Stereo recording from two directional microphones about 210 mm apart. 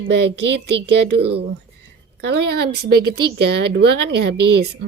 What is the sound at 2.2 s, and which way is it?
Speech, 50° right (ahead or behind).